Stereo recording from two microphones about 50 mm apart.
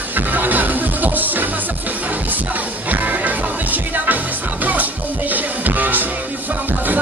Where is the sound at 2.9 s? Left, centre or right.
Right.